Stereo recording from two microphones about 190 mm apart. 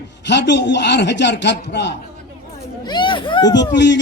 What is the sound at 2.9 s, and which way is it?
Speech, 25° left (ahead or behind).